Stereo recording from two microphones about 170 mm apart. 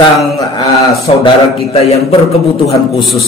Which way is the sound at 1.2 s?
35° left (ahead or behind).